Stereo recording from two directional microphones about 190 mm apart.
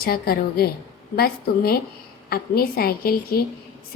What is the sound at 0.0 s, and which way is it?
Speech, 55° left (ahead or behind).